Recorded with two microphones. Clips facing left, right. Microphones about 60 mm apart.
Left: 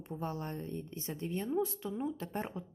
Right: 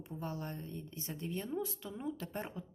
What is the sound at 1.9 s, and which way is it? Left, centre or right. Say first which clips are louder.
Speech: left 4 dB; centre.